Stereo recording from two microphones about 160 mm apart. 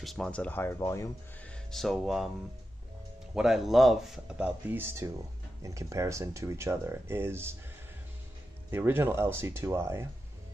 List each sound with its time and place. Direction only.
0.0 s speech: centre (ahead or behind)
1.7 s speech: centre (ahead or behind)
3.3 s speech: centre (ahead or behind)
8.6 s speech: 15° right (ahead or behind)